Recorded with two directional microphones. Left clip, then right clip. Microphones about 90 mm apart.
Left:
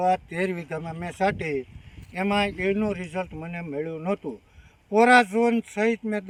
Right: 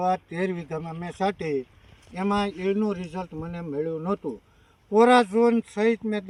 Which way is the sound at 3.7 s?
45° left (ahead or behind).